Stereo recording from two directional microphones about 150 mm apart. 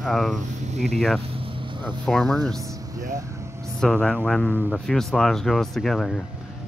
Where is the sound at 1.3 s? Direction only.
35° right (ahead or behind).